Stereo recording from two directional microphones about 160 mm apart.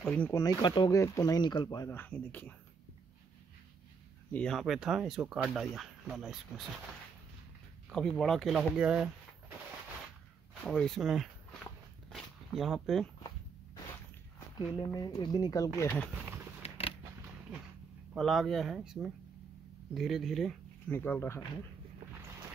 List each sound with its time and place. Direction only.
0.0 s speech: 10° left (ahead or behind)
0.4 s speech: 25° left (ahead or behind)
1.9 s speech: 10° left (ahead or behind)
4.3 s speech: 5° left (ahead or behind)
7.9 s speech: centre (ahead or behind)
10.6 s speech: 5° left (ahead or behind)
14.8 s speech: 20° left (ahead or behind)
16.6 s creak: 35° left (ahead or behind)
18.1 s speech: centre (ahead or behind)
20.9 s speech: 15° left (ahead or behind)